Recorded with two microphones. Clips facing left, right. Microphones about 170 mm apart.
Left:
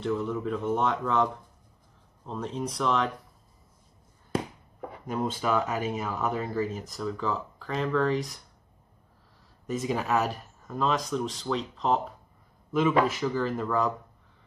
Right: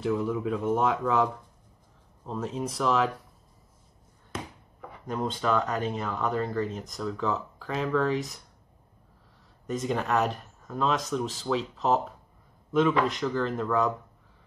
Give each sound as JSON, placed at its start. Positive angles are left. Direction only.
{"t": 0.0, "sound": "speech", "side_deg": -5}
{"t": 5.0, "sound": "speech", "side_deg": 5}
{"t": 9.7, "sound": "speech", "side_deg": 5}